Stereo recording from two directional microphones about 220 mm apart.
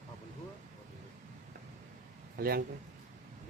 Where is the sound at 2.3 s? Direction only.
45° right (ahead or behind).